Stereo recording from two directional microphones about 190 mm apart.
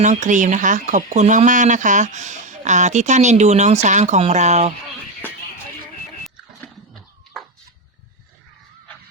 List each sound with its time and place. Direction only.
0.0 s speech: 40° right (ahead or behind)